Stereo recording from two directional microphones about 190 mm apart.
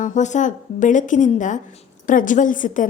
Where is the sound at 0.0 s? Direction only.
40° left (ahead or behind).